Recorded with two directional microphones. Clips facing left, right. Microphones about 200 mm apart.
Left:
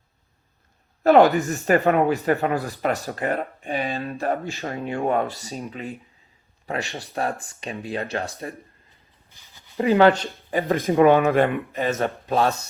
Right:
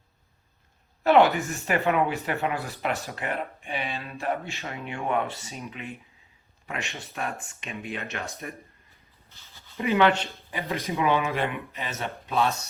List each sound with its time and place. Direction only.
1.0 s speech: 40° left (ahead or behind)
9.3 s a sound: 15° left (ahead or behind)
9.7 s speech: 35° left (ahead or behind)
10.5 s speech: 50° left (ahead or behind)